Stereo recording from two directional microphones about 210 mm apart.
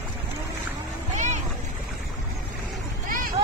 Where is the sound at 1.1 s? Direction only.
35° right (ahead or behind).